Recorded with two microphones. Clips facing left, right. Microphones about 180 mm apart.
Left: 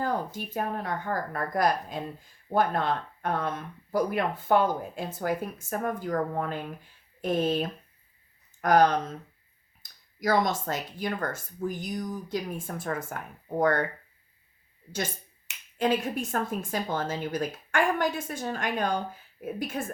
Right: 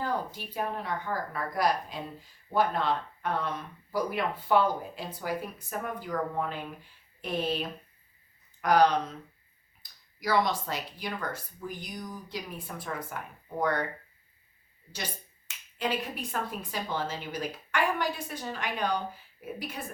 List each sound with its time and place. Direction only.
0.0 s speech: 45° left (ahead or behind)
15.8 s speech: 45° left (ahead or behind)